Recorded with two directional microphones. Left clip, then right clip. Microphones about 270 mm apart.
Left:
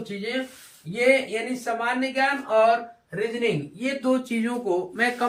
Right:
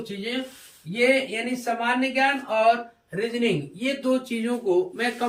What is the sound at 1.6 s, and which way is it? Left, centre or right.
Speech, centre.